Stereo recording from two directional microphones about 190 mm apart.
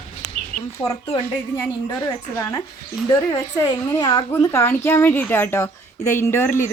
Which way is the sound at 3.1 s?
20° left (ahead or behind).